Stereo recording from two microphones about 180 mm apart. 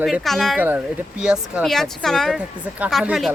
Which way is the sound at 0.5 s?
10° right (ahead or behind).